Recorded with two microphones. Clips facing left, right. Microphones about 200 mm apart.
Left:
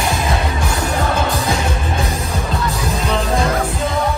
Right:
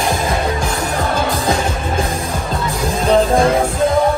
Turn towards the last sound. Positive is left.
turn(degrees=-30)  # may be behind; listen again after turning